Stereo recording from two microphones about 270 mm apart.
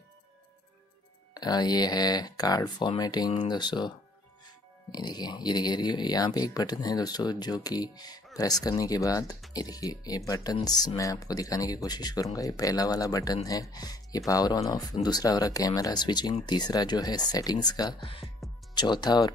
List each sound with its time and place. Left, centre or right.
1.3 s speech: centre
4.9 s speech: centre
18.4 s music: centre
18.8 s speech: centre